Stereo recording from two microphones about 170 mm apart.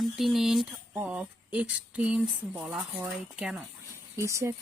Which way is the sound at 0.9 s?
10° right (ahead or behind).